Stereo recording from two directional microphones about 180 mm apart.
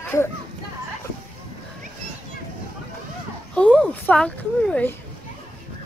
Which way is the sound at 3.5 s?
5° left (ahead or behind).